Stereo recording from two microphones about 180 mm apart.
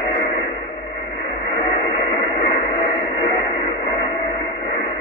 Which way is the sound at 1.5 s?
35° left (ahead or behind).